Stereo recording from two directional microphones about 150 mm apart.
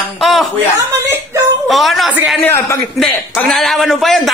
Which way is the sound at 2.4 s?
15° left (ahead or behind).